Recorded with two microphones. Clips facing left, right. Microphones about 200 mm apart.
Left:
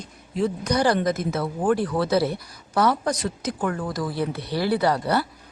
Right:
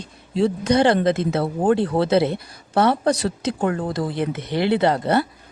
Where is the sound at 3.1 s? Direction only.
70° right (ahead or behind).